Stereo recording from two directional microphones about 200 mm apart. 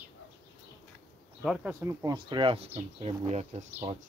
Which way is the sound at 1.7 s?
15° right (ahead or behind).